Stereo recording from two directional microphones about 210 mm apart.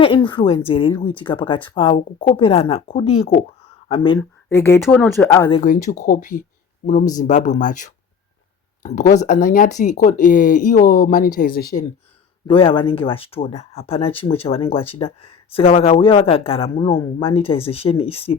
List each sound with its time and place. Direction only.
0.0 s speech: 25° left (ahead or behind)
4.2 s speech: 15° left (ahead or behind)
5.6 s speech: 40° left (ahead or behind)
12.5 s speech: 25° left (ahead or behind)